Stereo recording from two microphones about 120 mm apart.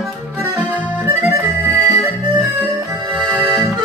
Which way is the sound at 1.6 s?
20° right (ahead or behind).